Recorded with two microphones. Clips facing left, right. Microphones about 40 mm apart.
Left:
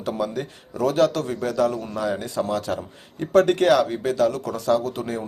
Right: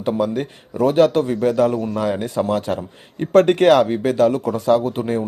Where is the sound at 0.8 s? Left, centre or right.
Right.